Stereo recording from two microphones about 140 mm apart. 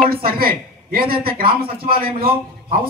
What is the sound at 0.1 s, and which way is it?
A man's voice, 90° right.